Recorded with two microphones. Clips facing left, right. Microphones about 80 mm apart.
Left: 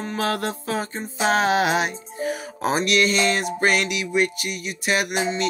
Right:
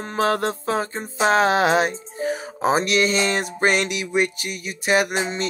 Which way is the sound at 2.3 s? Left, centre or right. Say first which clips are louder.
Right 4 dB; right.